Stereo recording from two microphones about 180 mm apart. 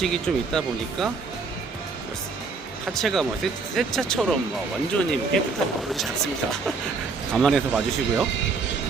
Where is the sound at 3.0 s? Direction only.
Centre (ahead or behind).